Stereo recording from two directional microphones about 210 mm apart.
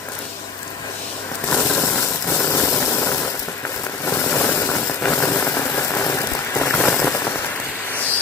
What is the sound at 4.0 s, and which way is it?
Vehicle, 10° left (ahead or behind).